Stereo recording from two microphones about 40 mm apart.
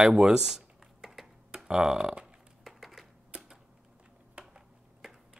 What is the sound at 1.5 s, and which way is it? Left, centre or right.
Speech, centre.